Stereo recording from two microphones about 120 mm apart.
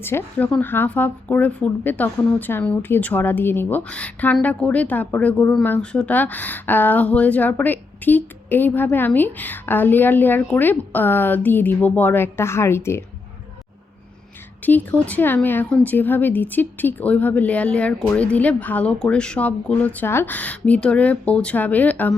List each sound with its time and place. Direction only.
0.0 s a woman's voice: 20° left (ahead or behind)
14.6 s a woman's voice: 15° left (ahead or behind)